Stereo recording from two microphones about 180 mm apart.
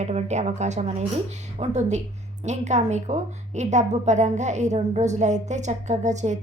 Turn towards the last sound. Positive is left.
turn(degrees=-40)  # may be behind; listen again after turning